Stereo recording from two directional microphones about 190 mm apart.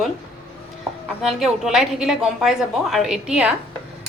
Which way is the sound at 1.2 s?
Centre (ahead or behind).